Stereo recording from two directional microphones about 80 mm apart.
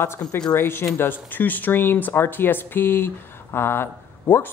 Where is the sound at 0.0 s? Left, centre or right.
Left.